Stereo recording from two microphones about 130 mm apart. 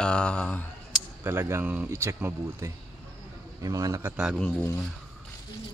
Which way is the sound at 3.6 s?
30° right (ahead or behind).